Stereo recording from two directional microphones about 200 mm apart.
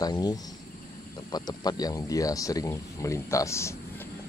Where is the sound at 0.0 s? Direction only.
20° left (ahead or behind).